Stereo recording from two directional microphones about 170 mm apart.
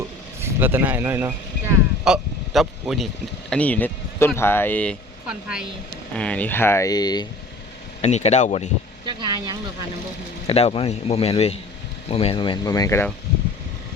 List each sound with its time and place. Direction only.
0.4 s speech: 10° right (ahead or behind)
2.0 s speech: centre (ahead or behind)
5.3 s speech: 5° right (ahead or behind)
6.1 s speech: 5° left (ahead or behind); by 7.3 s 25° left (ahead or behind)
8.0 s speech: 40° left (ahead or behind)
9.0 s vehicle: 25° right (ahead or behind)
10.4 s speech: 35° left (ahead or behind); by 13.1 s 20° left (ahead or behind)